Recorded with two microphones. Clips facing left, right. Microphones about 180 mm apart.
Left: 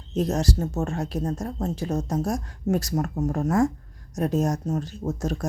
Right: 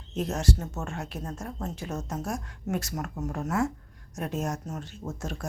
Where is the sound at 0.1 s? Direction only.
35° left (ahead or behind).